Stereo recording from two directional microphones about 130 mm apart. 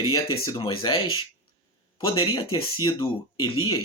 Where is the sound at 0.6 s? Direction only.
45° left (ahead or behind).